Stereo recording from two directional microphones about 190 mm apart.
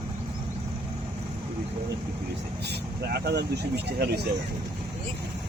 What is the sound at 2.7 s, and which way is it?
Speech, 60° right (ahead or behind).